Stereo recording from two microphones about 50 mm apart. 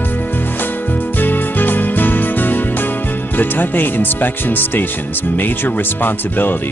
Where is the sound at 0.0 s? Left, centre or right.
Left.